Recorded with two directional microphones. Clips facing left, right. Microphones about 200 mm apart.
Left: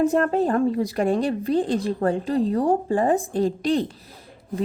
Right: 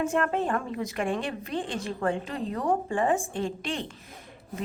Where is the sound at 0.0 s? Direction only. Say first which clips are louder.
Left 7 dB; 35° left (ahead or behind).